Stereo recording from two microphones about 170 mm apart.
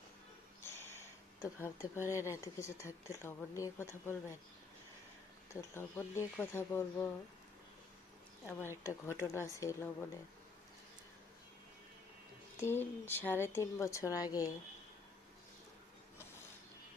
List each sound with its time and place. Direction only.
0.6 s speech: 15° left (ahead or behind)
5.5 s speech: 15° left (ahead or behind)
8.4 s speech: 15° left (ahead or behind)
12.5 s speech: 15° left (ahead or behind)